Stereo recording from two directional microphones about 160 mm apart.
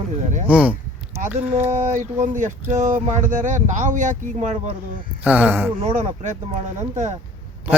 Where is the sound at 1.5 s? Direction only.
45° right (ahead or behind).